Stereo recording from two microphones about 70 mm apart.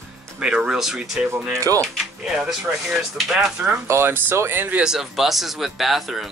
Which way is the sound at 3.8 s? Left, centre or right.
Right.